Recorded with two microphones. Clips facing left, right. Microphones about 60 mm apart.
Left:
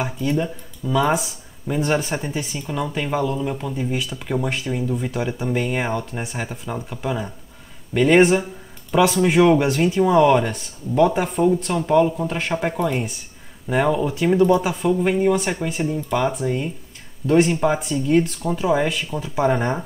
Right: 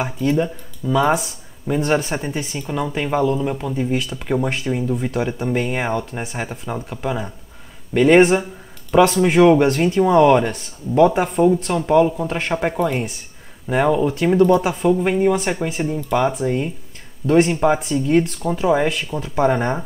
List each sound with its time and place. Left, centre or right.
0.0 s speech: centre
1.1 s speech: centre
19.4 s speech: centre